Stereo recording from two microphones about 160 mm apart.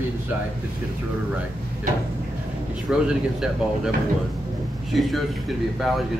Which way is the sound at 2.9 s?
5° right (ahead or behind).